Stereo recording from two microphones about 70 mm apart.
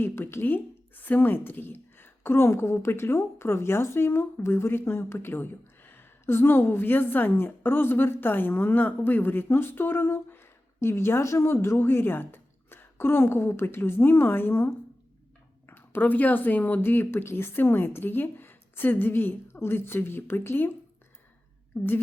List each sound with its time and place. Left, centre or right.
0.0 s a woman's voice: left
21.7 s a woman's voice: left